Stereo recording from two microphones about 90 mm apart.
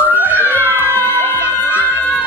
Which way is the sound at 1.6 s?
20° right (ahead or behind).